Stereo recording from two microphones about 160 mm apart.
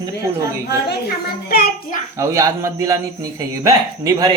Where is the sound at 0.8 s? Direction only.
75° left (ahead or behind).